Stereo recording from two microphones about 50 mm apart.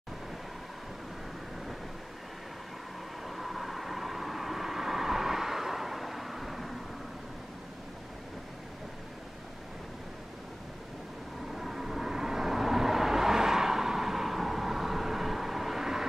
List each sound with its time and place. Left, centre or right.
3.3 s vehicle: centre
11.5 s vehicle: centre